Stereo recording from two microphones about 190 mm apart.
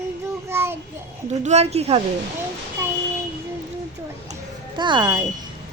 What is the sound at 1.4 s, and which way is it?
Speech, 35° right (ahead or behind).